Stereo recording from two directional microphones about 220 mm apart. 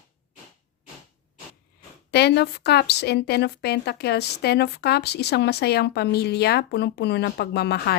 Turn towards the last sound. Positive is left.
turn(degrees=50)  # may be behind; listen again after turning